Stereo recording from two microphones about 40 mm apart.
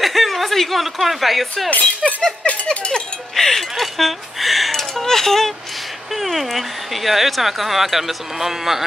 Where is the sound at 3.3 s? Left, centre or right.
Centre.